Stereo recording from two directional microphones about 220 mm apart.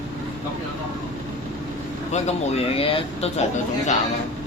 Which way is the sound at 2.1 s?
25° left (ahead or behind).